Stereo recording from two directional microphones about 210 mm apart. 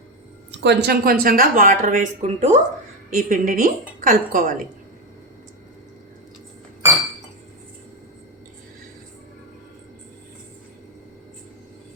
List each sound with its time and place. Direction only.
0.6 s a woman's voice: 55° right (ahead or behind); by 4.5 s 40° right (ahead or behind)